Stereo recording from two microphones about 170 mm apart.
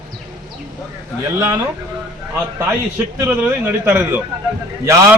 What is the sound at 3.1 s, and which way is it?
A man's voice, 10° right (ahead or behind).